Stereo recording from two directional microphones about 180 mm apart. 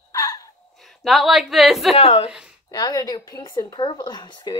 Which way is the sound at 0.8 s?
Centre (ahead or behind).